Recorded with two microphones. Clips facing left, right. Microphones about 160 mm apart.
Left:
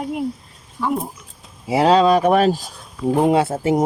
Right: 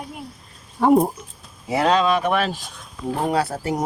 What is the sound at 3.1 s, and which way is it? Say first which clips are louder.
Speech: left 6 dB; 20° left (ahead or behind).